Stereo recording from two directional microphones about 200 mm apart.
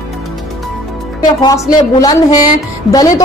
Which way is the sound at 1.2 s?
20° left (ahead or behind).